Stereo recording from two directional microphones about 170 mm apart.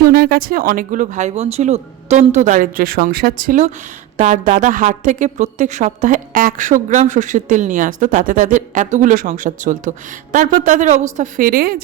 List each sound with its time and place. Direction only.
0.0 s speech: 65° right (ahead or behind); by 11.0 s 45° right (ahead or behind)
11.2 s a woman's voice: 55° right (ahead or behind)